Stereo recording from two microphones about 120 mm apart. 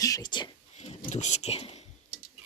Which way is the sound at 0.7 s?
65° left (ahead or behind).